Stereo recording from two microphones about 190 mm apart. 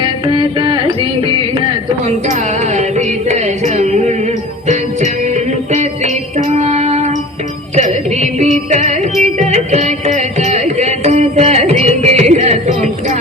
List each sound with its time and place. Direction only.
0.0 s carnatic music: 25° right (ahead or behind)
6.6 s child singing: 35° right (ahead or behind)
7.8 s music: 40° right (ahead or behind)
9.5 s carnatic music: 35° right (ahead or behind)